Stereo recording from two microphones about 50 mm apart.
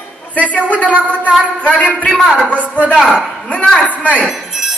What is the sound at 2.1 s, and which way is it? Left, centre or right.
Speech, centre.